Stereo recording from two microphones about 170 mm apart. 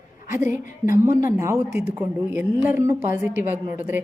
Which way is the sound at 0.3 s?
15° right (ahead or behind).